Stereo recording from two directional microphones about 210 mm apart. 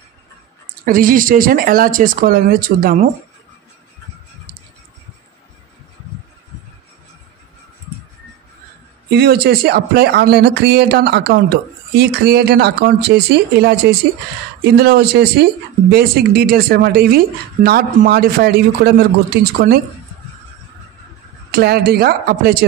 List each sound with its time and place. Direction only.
0.8 s speech: 40° right (ahead or behind)
9.1 s speech: 50° right (ahead or behind)
21.5 s speech: 50° right (ahead or behind)